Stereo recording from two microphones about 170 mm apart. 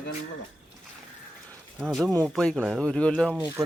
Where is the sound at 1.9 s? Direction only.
Centre (ahead or behind).